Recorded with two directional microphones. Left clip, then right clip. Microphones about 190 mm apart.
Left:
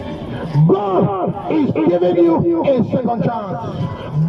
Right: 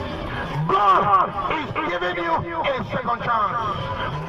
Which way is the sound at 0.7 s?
45° left (ahead or behind).